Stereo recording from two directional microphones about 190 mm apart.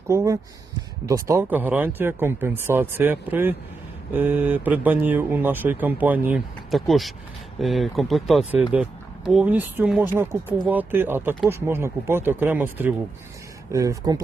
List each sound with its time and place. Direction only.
0.1 s speech: 15° right (ahead or behind)